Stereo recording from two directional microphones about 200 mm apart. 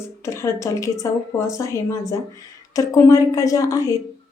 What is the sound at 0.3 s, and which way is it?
Speech, 15° left (ahead or behind).